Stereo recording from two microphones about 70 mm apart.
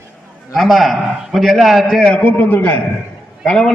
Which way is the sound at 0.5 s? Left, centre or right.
Centre.